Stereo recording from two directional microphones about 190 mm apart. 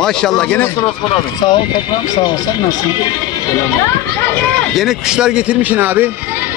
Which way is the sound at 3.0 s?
20° left (ahead or behind).